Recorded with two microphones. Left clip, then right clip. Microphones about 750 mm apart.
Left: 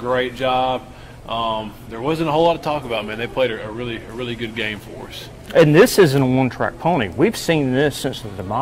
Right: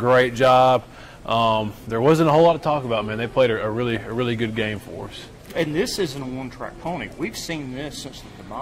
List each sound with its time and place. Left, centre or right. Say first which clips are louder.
0.0 s a man's voice: right 4 dB; right
5.5 s speech: left 12 dB; left